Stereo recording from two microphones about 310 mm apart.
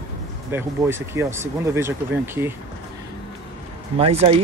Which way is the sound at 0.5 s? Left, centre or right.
Centre.